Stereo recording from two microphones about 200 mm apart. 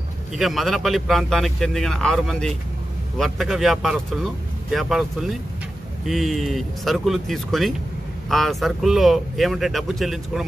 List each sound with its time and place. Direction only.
0.3 s speech: centre (ahead or behind)